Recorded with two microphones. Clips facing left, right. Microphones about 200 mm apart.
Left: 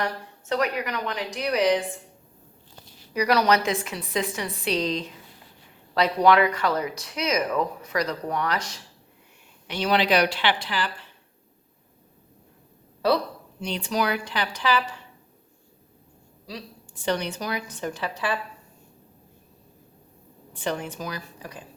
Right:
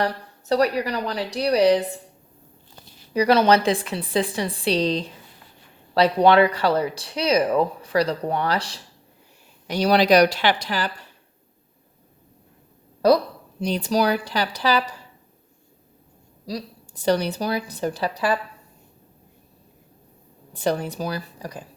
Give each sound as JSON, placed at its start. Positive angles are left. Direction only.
{"t": 0.0, "sound": "speech", "side_deg": -35}
{"t": 3.1, "sound": "speech", "side_deg": -30}
{"t": 13.6, "sound": "speech", "side_deg": -40}
{"t": 16.5, "sound": "speech", "side_deg": -40}
{"t": 20.5, "sound": "speech", "side_deg": -40}